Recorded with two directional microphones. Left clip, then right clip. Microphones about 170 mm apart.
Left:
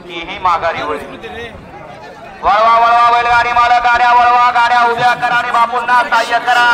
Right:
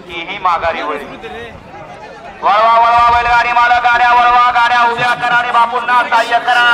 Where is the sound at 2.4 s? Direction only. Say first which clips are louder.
Even; 10° right (ahead or behind).